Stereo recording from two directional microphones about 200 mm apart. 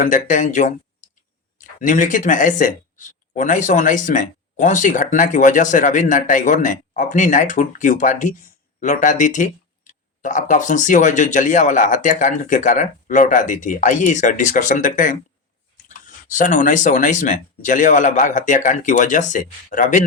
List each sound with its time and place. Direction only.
0.0 s speech: 40° left (ahead or behind)